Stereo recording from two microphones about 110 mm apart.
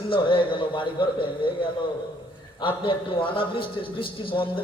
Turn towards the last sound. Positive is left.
turn(degrees=50)  # may be behind; listen again after turning